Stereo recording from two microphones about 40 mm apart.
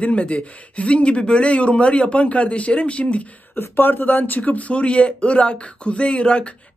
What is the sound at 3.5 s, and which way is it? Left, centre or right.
Speech, left.